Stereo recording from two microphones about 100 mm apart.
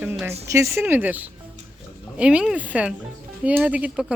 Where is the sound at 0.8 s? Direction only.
15° right (ahead or behind).